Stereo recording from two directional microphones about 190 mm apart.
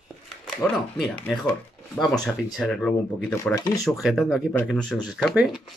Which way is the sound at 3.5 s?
20° left (ahead or behind).